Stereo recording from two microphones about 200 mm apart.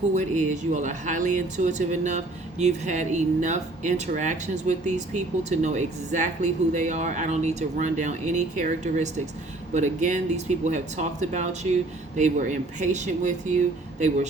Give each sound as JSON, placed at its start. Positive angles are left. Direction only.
{"t": 0.1, "sound": "speech", "side_deg": -35}